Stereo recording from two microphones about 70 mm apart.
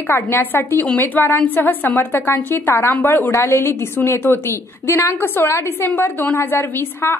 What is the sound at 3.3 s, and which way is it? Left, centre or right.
A woman's voice, left.